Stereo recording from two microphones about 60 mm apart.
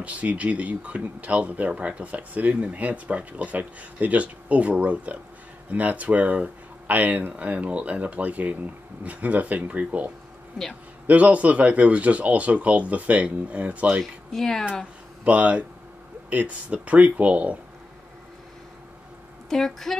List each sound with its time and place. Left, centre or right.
0.0 s speech: right
14.3 s speech: centre
15.2 s speech: right
19.5 s speech: centre